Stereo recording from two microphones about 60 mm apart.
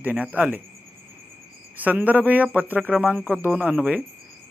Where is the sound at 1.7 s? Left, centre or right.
Right.